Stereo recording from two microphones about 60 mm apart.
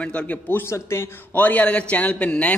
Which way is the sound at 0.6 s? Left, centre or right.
Left.